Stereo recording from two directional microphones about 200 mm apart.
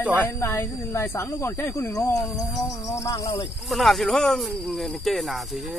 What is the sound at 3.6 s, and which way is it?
Speech, centre (ahead or behind).